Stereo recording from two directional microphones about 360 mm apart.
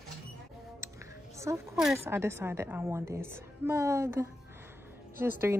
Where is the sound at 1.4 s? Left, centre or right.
Centre.